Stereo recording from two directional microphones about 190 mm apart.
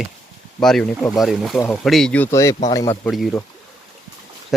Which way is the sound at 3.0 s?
Centre (ahead or behind).